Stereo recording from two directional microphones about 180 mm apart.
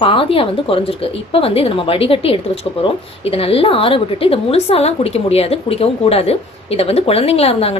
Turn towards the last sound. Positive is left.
turn(degrees=35)  # may be behind; listen again after turning